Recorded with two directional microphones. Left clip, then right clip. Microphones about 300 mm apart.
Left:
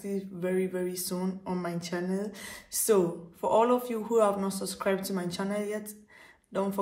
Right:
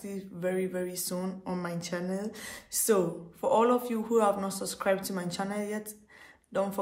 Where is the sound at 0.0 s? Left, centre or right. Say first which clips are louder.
Left 1 dB; centre.